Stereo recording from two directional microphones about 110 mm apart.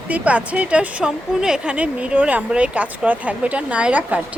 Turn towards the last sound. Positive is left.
turn(degrees=-10)  # may be behind; listen again after turning